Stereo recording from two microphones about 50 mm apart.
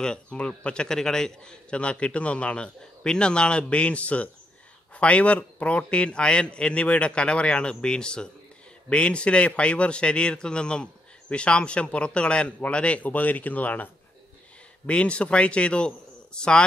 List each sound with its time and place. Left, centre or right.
0.0 s a man's voice: centre
14.9 s a man's voice: left